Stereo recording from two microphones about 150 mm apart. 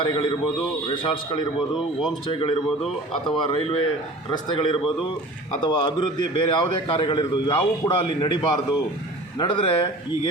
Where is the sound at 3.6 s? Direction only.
40° left (ahead or behind).